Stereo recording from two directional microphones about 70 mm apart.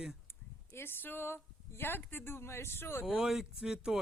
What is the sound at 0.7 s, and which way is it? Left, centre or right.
A woman's voice, left.